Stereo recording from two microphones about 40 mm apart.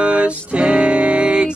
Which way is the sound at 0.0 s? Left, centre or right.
Right.